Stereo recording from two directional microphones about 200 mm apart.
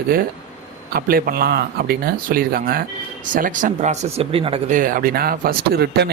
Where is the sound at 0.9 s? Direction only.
45° right (ahead or behind); by 4.6 s 25° right (ahead or behind).